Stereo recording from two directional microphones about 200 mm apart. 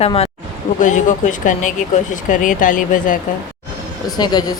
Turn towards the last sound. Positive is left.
turn(degrees=20)  # may be behind; listen again after turning